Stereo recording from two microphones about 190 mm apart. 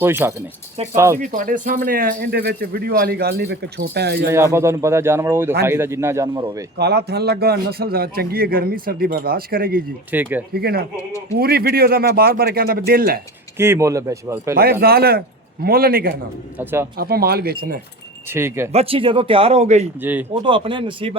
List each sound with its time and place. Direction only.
0.0 s speech: 10° right (ahead or behind)
1.2 s speech: 45° right (ahead or behind); by 4.3 s 60° right (ahead or behind)
4.5 s speech: 15° right (ahead or behind)
6.7 s speech: 60° right (ahead or behind)
10.1 s speech: 10° right (ahead or behind)
10.5 s speech: 55° right (ahead or behind)
13.6 s speech: 15° right (ahead or behind)
14.5 s speech: 55° right (ahead or behind)
18.3 s speech: 10° right (ahead or behind)
18.7 s speech: 30° right (ahead or behind)
20.0 s speech: 10° right (ahead or behind)
20.4 s speech: 25° right (ahead or behind)